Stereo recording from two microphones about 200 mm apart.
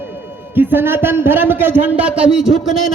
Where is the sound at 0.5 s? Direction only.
10° right (ahead or behind).